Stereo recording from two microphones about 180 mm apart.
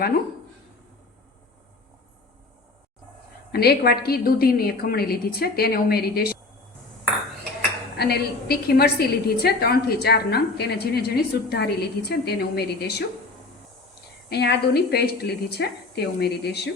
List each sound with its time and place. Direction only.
3.5 s a woman's voice: 60° left (ahead or behind)
7.9 s a woman's voice: 60° left (ahead or behind)
14.3 s a woman's voice: 65° left (ahead or behind)